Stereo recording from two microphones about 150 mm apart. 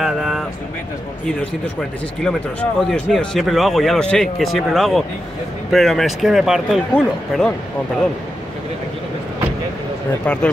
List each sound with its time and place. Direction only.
0.0 s a sound: centre (ahead or behind)
2.2 s speech: 5° left (ahead or behind)
10.2 s speech: 10° left (ahead or behind)